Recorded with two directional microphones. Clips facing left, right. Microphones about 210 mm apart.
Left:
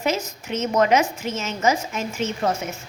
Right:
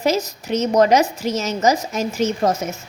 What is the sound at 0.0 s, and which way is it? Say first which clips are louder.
A woman's voice: right 5 dB; 40° right (ahead or behind).